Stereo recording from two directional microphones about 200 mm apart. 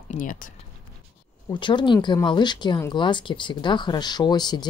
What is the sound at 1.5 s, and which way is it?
Speech, 25° left (ahead or behind).